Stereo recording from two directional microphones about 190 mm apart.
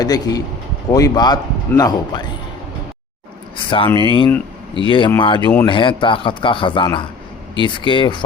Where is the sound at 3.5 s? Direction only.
25° left (ahead or behind).